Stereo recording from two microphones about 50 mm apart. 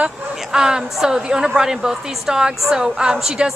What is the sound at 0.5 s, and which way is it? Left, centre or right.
A woman's voice, centre.